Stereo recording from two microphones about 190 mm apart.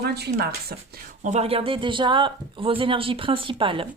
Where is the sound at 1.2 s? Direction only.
35° right (ahead or behind).